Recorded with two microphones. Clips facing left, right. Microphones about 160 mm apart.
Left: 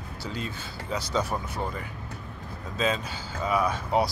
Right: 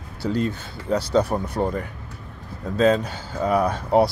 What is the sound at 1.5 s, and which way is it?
Speech, 40° right (ahead or behind).